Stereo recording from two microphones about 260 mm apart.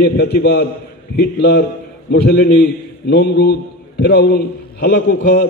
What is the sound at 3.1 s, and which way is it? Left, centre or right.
A man's voice, left.